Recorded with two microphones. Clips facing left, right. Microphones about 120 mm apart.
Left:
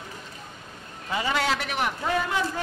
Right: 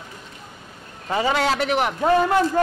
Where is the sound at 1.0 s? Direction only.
45° right (ahead or behind).